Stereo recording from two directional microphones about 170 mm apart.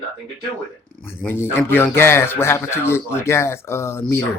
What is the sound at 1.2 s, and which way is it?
A man's voice, 15° left (ahead or behind).